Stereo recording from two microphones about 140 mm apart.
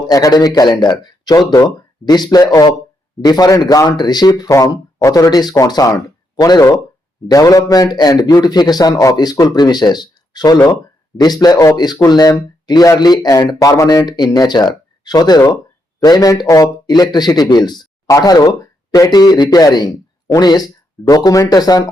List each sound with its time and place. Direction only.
0.1 s speech: 30° left (ahead or behind)